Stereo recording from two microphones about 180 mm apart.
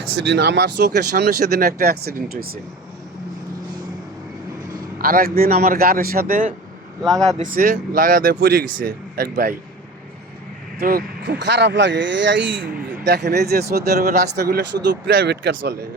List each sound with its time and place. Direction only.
0.3 s speech: 70° right (ahead or behind)
4.9 s speech: 55° right (ahead or behind)
7.0 s speech: centre (ahead or behind)
7.3 s speech: 45° right (ahead or behind)
10.8 s speech: 55° right (ahead or behind); by 12.6 s 90° right
13.1 s speech: 70° right (ahead or behind)